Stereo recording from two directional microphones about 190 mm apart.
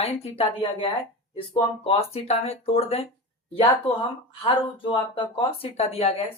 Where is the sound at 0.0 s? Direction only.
35° left (ahead or behind).